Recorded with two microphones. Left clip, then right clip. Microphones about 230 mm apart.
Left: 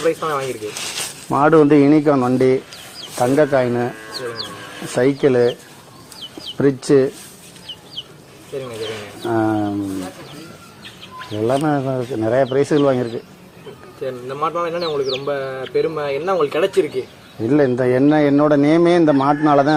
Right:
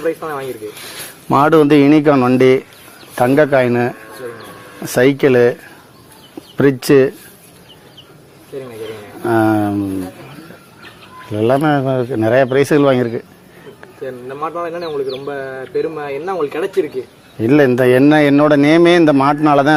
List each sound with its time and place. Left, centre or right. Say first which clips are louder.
0.0 s speech: left 1 dB; centre
1.3 s speech: right 2 dB; right
4.9 s speech: right 4 dB; right
6.6 s speech: right 4 dB; right
9.2 s a sound: right 5 dB; right
11.3 s speech: right 5 dB; right
14.3 s speech: left 1 dB; centre
17.4 s speech: right 5 dB; right